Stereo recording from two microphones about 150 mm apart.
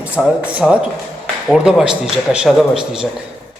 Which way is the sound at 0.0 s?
10° right (ahead or behind).